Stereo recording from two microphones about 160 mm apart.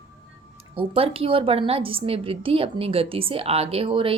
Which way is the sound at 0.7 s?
35° right (ahead or behind).